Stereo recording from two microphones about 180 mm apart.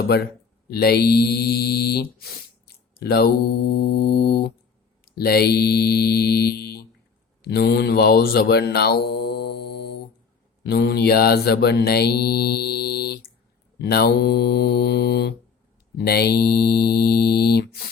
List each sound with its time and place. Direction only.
0.7 s mantra: 60° left (ahead or behind)